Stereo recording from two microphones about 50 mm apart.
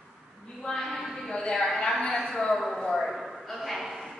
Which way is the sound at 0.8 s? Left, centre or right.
Centre.